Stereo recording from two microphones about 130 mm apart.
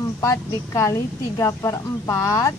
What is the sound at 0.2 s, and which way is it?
A woman's voice, 25° left (ahead or behind).